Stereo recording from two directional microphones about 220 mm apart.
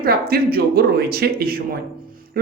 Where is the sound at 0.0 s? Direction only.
45° right (ahead or behind).